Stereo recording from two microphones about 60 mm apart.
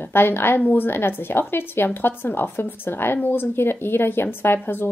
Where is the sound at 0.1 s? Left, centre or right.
Left.